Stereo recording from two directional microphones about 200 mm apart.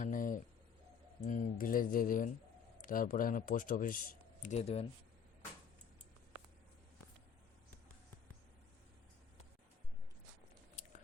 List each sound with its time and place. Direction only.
0.0 s a sound: 40° left (ahead or behind)
1.2 s speech: 40° left (ahead or behind)
4.4 s speech: 30° left (ahead or behind)